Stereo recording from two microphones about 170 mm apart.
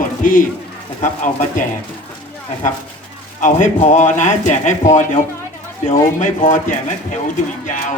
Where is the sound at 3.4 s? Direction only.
50° left (ahead or behind).